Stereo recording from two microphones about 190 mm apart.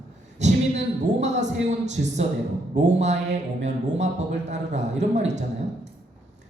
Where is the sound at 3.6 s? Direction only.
35° right (ahead or behind).